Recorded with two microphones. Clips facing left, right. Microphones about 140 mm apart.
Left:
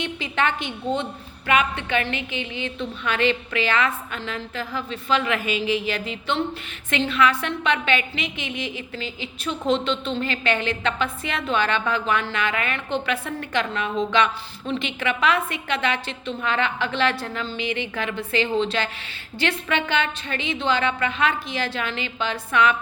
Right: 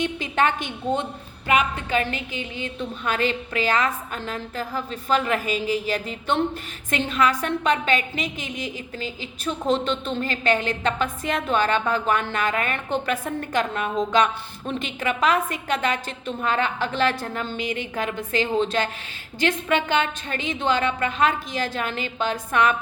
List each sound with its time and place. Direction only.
0.0 s a woman's voice: 45° right (ahead or behind)
1.5 s music: 40° right (ahead or behind)
3.0 s a woman's voice: 40° right (ahead or behind)